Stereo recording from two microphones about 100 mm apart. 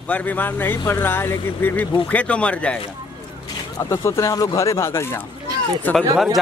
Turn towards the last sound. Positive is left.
turn(degrees=15)  # may be behind; listen again after turning